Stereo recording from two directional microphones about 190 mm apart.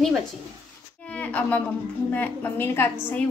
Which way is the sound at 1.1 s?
5° left (ahead or behind).